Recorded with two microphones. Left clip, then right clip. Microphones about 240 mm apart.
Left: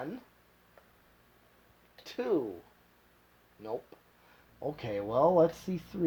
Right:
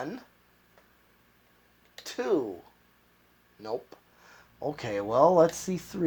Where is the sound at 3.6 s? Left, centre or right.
Right.